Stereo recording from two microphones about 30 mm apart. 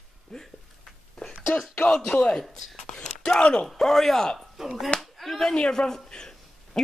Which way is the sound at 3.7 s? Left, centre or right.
Centre.